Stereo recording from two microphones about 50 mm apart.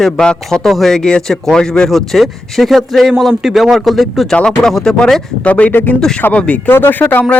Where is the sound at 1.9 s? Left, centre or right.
Centre.